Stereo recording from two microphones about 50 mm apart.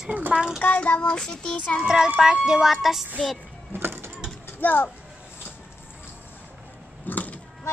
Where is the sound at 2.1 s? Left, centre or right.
Centre.